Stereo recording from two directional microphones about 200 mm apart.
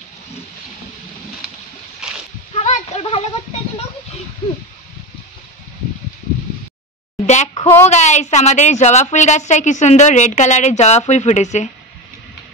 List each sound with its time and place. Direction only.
2.0 s splash: 5° right (ahead or behind)
2.5 s splash: 35° left (ahead or behind)
4.4 s speech: 25° left (ahead or behind)
7.2 s a sound: 35° left (ahead or behind)
7.8 s a woman's voice: 35° left (ahead or behind)